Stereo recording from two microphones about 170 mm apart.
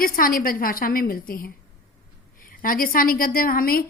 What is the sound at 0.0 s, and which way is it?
A woman's voice, 55° left (ahead or behind).